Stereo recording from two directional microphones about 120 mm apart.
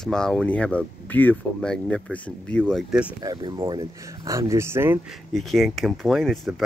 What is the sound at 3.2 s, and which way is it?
Speech, 40° right (ahead or behind).